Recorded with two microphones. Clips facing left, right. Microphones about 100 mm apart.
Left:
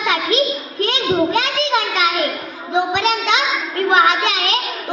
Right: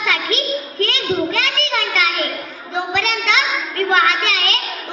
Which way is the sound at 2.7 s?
25° left (ahead or behind).